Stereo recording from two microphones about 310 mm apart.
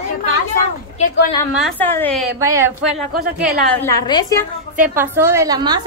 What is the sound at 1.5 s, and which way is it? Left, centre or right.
A woman's voice, centre.